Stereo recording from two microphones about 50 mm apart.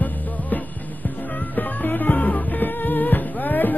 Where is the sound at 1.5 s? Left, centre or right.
Left.